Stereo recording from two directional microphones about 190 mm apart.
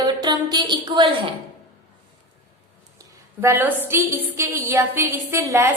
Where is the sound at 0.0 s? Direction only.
20° right (ahead or behind).